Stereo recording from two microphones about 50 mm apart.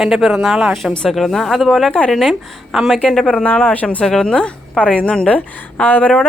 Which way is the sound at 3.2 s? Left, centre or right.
Left.